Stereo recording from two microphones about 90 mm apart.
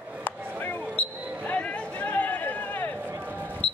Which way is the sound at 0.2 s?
20° left (ahead or behind).